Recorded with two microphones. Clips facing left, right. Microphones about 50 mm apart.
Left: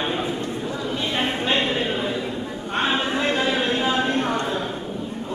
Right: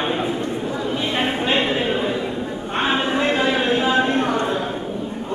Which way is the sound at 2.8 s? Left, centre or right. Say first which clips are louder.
Right 3 dB; centre.